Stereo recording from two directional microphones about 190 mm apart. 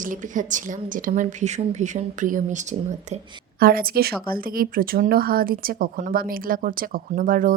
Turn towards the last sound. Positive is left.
turn(degrees=-45)  # may be behind; listen again after turning